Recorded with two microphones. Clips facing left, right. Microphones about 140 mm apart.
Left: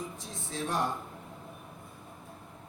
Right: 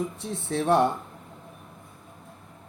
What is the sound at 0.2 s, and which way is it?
Speech, 65° right (ahead or behind).